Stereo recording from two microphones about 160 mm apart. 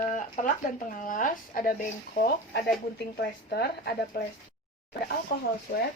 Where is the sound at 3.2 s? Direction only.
90° left.